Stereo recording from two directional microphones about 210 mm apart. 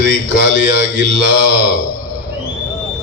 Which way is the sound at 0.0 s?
60° right (ahead or behind).